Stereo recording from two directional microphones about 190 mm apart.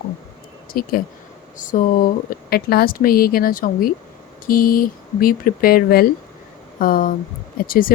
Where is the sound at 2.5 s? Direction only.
55° left (ahead or behind).